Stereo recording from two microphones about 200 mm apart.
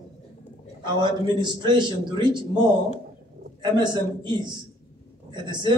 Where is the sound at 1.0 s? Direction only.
20° right (ahead or behind).